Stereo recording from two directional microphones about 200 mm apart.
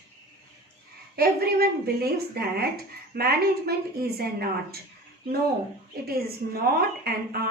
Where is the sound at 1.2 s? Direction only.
50° right (ahead or behind).